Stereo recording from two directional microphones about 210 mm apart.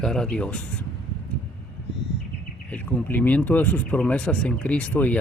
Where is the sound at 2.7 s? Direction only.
5° left (ahead or behind).